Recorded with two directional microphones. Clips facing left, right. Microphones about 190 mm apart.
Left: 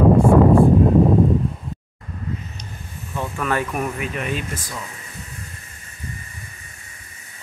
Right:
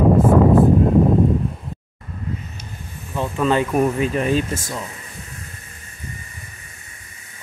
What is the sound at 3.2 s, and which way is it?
Speech, 20° right (ahead or behind).